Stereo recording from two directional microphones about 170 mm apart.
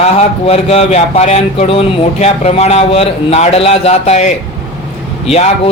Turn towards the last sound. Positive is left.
turn(degrees=40)  # may be behind; listen again after turning